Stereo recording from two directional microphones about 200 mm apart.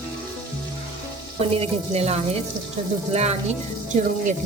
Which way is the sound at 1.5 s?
30° right (ahead or behind).